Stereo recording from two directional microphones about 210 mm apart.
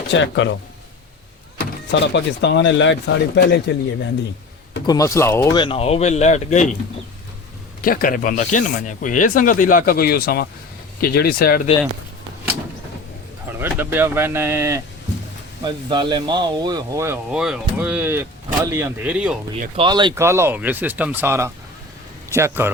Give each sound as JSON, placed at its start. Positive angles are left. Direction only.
{"t": 0.1, "sound": "speech", "side_deg": 60}
{"t": 1.9, "sound": "speech", "side_deg": 55}
{"t": 4.9, "sound": "speech", "side_deg": 15}
{"t": 5.5, "sound": "speech", "side_deg": 25}
{"t": 7.8, "sound": "speech", "side_deg": 40}
{"t": 13.6, "sound": "speech", "side_deg": -10}
{"t": 19.7, "sound": "a man's voice", "side_deg": -20}